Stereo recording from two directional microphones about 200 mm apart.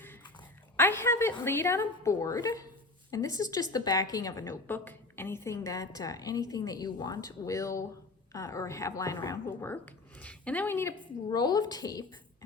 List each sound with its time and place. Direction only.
0.8 s a woman's voice: 10° left (ahead or behind)